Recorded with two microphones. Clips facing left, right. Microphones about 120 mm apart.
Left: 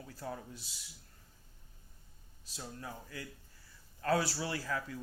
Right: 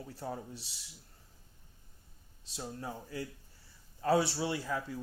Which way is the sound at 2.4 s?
25° right (ahead or behind).